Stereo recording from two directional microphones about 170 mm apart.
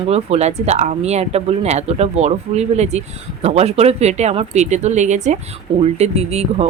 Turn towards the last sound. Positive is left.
turn(degrees=-40)  # may be behind; listen again after turning